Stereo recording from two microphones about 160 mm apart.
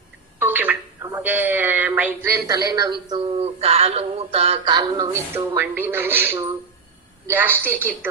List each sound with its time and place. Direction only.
0.3 s a sound: 10° right (ahead or behind)
2.5 s speech: 25° right (ahead or behind)
3.2 s a woman's voice: 40° right (ahead or behind); by 8.1 s 15° right (ahead or behind)